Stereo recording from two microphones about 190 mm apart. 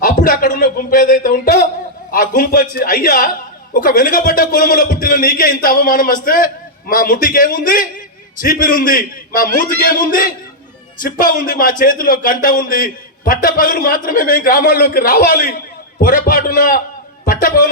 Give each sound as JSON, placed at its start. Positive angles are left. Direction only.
{"t": 0.0, "sound": "a man's voice", "side_deg": 45}